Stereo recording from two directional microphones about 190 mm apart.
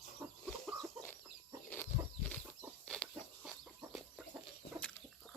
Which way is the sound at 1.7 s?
10° left (ahead or behind).